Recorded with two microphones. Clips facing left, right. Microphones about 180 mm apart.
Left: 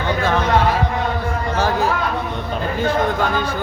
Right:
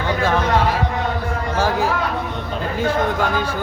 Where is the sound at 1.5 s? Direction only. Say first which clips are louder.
Even; 10° right (ahead or behind).